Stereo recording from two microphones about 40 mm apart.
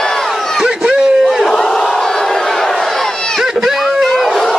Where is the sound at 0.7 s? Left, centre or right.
Centre.